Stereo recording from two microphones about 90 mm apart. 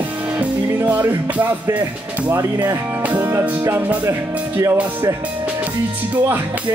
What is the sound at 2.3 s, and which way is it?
Speech, 35° right (ahead or behind).